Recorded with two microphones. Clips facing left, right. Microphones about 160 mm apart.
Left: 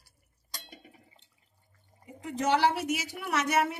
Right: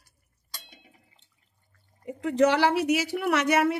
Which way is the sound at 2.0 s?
75° right (ahead or behind).